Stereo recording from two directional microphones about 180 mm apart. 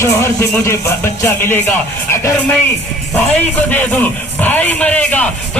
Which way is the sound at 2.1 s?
15° left (ahead or behind).